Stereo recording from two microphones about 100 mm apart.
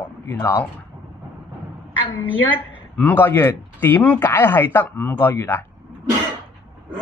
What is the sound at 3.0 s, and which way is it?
Speech, 20° left (ahead or behind).